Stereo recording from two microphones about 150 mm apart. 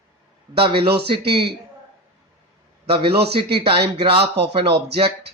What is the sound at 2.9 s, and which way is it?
Speech, 35° right (ahead or behind).